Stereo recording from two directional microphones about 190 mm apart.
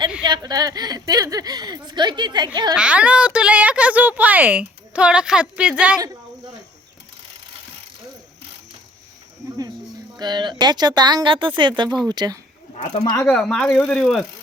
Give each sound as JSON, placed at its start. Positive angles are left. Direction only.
{"t": 0.3, "sound": "a woman's voice", "side_deg": -20}
{"t": 2.7, "sound": "a child's voice", "side_deg": -5}
{"t": 10.2, "sound": "a woman's voice", "side_deg": -25}
{"t": 12.7, "sound": "speech", "side_deg": 35}
{"t": 13.2, "sound": "speech", "side_deg": 5}